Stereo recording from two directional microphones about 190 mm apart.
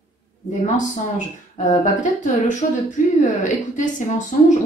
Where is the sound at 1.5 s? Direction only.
40° left (ahead or behind).